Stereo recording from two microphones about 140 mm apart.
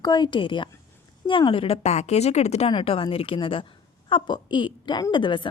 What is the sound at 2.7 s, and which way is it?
A woman's voice, 40° left (ahead or behind).